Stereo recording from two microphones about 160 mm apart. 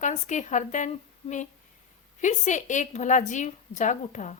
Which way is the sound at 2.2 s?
50° left (ahead or behind).